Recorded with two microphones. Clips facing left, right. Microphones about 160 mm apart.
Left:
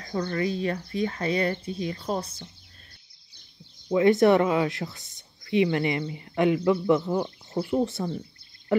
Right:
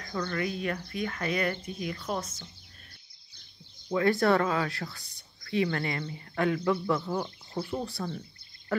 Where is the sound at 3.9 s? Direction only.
20° left (ahead or behind).